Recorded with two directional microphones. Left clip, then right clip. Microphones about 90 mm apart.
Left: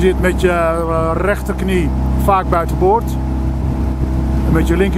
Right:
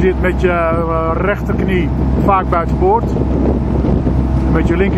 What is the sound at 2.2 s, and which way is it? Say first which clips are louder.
Speech: even; 20° left (ahead or behind).